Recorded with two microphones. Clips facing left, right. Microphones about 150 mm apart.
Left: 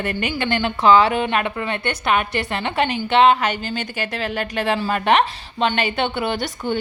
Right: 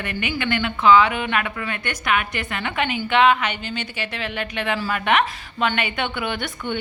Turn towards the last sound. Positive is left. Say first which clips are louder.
# left 4 dB
turn(degrees=35)  # may be behind; listen again after turning